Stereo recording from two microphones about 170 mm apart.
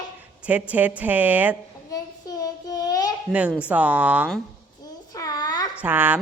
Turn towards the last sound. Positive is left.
turn(degrees=-10)  # may be behind; listen again after turning